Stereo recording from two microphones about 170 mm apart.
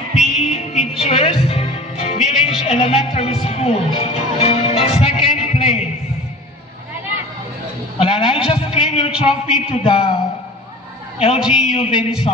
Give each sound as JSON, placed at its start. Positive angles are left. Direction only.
{"t": 0.4, "sound": "music", "side_deg": 40}
{"t": 8.0, "sound": "bleat", "side_deg": 35}
{"t": 8.5, "sound": "a sound", "side_deg": 35}
{"t": 9.2, "sound": "a man's voice", "side_deg": 35}
{"t": 11.3, "sound": "a man's voice", "side_deg": -5}